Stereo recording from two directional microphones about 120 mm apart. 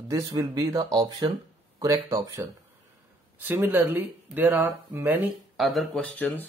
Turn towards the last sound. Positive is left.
turn(degrees=15)  # may be behind; listen again after turning